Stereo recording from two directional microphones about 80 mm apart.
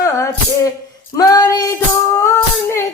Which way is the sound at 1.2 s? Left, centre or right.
Left.